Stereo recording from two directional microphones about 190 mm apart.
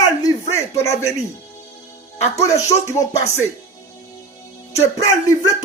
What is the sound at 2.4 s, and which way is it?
Speech, 15° left (ahead or behind).